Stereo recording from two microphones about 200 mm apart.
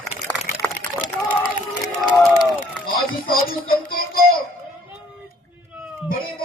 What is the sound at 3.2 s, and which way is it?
Music, 45° left (ahead or behind).